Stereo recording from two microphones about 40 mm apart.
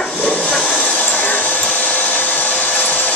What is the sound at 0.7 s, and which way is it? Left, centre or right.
Hair dryer, left.